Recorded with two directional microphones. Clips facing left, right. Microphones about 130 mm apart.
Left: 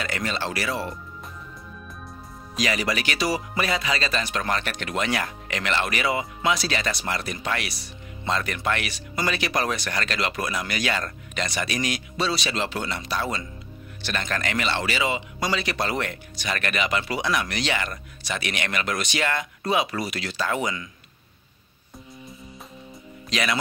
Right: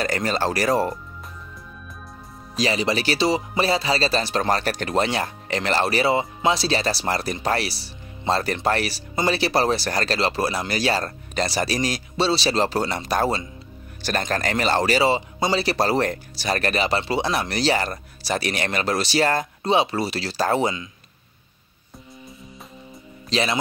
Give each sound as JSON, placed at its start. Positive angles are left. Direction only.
{"t": 0.0, "sound": "speech", "side_deg": -40}
{"t": 2.5, "sound": "speech", "side_deg": -30}
{"t": 23.3, "sound": "speech", "side_deg": -30}